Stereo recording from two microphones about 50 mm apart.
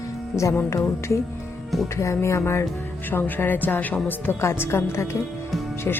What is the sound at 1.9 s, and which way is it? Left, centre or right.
Music, left.